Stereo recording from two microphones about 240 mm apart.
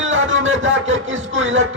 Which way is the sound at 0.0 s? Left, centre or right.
Right.